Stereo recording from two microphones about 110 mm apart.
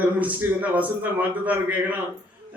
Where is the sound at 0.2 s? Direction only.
15° right (ahead or behind).